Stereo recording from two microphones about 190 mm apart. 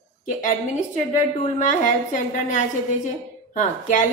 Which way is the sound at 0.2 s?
45° left (ahead or behind).